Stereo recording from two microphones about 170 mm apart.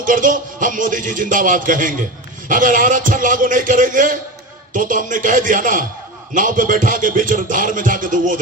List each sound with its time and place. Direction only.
0.0 s a man's voice: 50° right (ahead or behind)